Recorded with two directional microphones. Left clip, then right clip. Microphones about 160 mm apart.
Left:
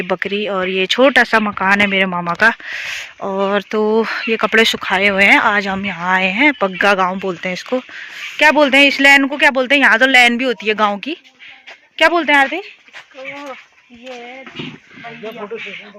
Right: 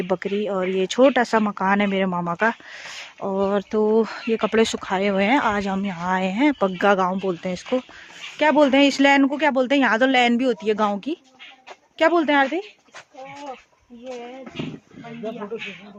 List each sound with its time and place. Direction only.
0.0 s a man's voice: 5° right (ahead or behind)